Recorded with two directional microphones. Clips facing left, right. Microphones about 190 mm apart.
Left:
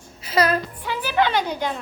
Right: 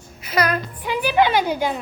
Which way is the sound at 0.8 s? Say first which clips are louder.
Right 5 dB; 15° right (ahead or behind).